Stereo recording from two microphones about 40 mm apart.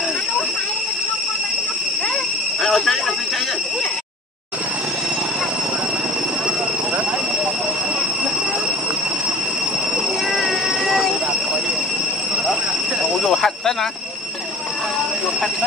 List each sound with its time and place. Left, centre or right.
2.6 s cricket: centre
10.3 s train: centre
13.2 s a sound: centre